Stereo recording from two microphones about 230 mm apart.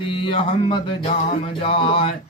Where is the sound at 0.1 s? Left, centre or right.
Left.